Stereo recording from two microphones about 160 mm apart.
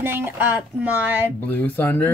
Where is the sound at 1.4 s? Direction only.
10° left (ahead or behind).